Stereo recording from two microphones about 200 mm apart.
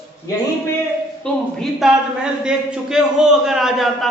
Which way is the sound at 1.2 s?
Centre (ahead or behind).